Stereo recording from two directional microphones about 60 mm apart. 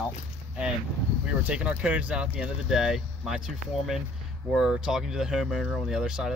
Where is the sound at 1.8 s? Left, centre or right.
Right.